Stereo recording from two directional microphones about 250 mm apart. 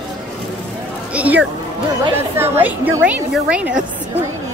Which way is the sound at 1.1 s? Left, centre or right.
Centre.